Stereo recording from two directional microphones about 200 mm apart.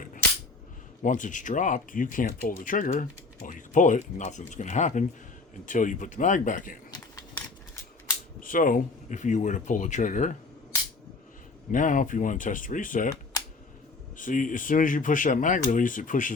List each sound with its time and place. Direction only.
1.0 s speech: 40° left (ahead or behind)
8.4 s speech: 45° left (ahead or behind)
11.7 s speech: 40° left (ahead or behind)
14.2 s speech: 40° left (ahead or behind)